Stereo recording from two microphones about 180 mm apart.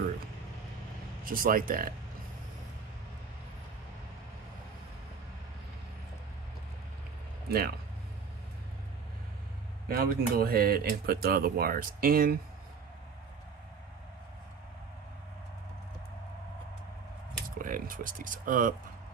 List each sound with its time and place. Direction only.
1.2 s speech: 50° right (ahead or behind)
7.4 s speech: 60° right (ahead or behind)
9.8 s speech: 55° right (ahead or behind)
17.6 s speech: 50° right (ahead or behind)